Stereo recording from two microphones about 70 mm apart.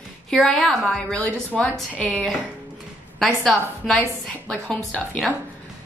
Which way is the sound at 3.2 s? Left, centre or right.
Centre.